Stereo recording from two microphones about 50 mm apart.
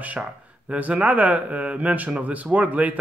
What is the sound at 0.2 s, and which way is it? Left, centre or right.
Speech, right.